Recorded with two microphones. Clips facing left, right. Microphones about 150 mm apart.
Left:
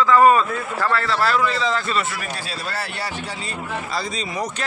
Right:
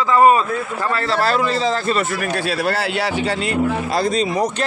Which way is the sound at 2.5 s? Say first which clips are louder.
Right 9 dB; 70° right (ahead or behind).